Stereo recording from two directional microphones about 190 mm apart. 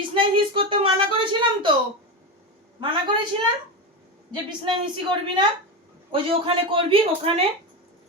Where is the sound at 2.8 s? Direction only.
25° right (ahead or behind).